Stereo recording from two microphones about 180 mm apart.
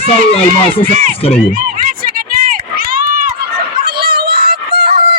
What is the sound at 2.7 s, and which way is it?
Run, 55° right (ahead or behind).